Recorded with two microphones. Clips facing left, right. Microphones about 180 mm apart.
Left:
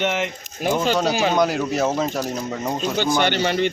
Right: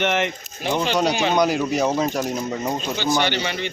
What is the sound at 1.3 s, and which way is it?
Speech, centre (ahead or behind).